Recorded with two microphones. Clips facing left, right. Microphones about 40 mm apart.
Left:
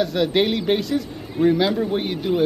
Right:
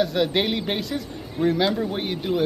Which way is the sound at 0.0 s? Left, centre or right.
Centre.